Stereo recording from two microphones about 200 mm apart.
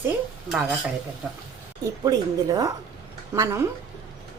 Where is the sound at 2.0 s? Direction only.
20° right (ahead or behind).